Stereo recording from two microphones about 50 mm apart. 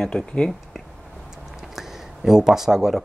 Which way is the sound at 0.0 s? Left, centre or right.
Centre.